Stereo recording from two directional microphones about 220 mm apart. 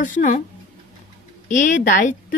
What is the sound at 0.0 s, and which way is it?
Speech, 35° left (ahead or behind).